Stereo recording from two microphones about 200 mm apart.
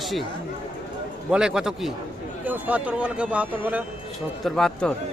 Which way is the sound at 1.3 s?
5° right (ahead or behind).